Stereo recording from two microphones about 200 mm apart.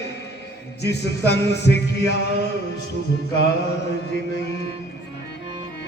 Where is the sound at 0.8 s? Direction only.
55° left (ahead or behind).